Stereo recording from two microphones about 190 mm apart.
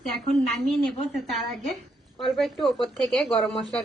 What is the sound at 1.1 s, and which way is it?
Speech, centre (ahead or behind).